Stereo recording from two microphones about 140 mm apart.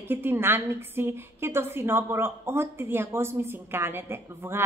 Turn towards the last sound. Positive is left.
turn(degrees=-15)  # may be behind; listen again after turning